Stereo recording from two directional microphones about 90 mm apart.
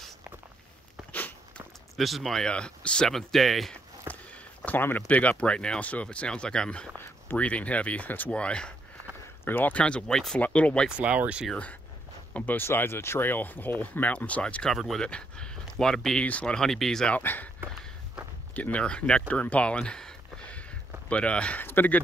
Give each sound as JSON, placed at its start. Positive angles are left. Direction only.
{"t": 2.0, "sound": "speech", "side_deg": 0}
{"t": 4.6, "sound": "speech", "side_deg": 20}
{"t": 9.4, "sound": "speech", "side_deg": 20}
{"t": 11.0, "sound": "speech", "side_deg": -15}
{"t": 12.4, "sound": "speech", "side_deg": 20}
{"t": 17.2, "sound": "speech", "side_deg": 20}
{"t": 18.5, "sound": "speech", "side_deg": 15}